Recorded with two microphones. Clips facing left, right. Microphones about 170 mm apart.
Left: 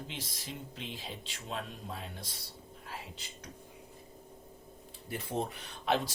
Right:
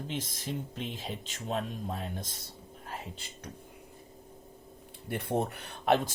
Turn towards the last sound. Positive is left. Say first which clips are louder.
# right 5 dB
turn(degrees=-50)  # may be behind; listen again after turning